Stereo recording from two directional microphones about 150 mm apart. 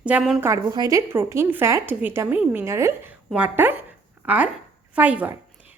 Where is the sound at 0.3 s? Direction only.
20° right (ahead or behind).